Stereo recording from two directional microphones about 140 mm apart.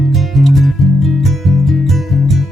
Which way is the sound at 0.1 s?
Centre (ahead or behind).